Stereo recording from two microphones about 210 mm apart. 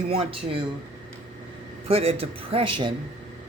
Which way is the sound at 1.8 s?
30° right (ahead or behind).